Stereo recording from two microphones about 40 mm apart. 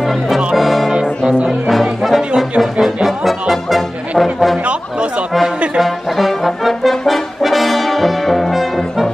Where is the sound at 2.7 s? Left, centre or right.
Centre.